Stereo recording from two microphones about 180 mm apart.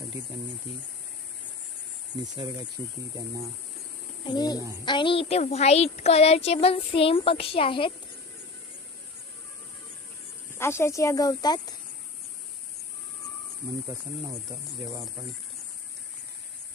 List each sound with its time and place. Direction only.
2.3 s speech: 25° right (ahead or behind)
4.3 s a child's voice: 20° left (ahead or behind)
10.5 s speech: 15° left (ahead or behind)